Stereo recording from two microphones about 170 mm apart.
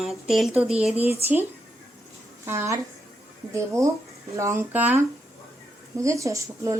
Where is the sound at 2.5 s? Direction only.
15° right (ahead or behind).